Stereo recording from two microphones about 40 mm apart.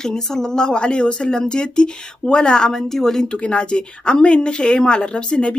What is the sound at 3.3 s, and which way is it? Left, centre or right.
Speech, left.